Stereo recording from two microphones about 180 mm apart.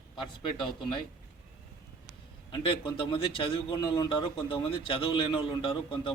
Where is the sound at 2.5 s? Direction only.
25° left (ahead or behind).